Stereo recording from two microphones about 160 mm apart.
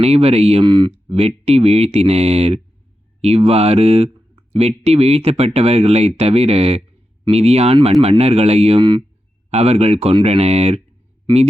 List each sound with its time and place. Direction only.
0.0 s speech: 40° right (ahead or behind)
0.6 s speech: 25° right (ahead or behind)